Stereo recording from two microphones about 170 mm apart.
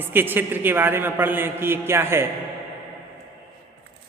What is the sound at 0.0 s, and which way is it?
A man's voice, 10° right (ahead or behind).